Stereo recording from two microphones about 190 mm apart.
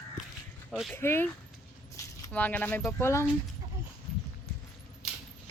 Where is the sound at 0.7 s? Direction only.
Centre (ahead or behind).